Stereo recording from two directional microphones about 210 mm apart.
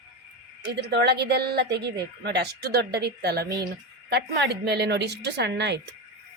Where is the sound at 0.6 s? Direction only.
50° right (ahead or behind).